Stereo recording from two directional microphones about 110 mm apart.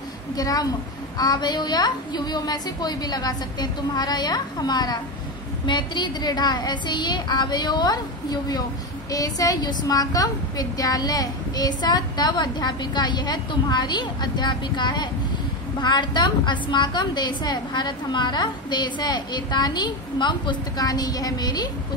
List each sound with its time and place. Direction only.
0.4 s a woman's voice: 35° left (ahead or behind)